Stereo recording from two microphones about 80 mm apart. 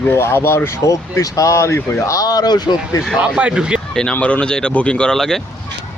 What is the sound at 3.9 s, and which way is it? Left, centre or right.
Speech, centre.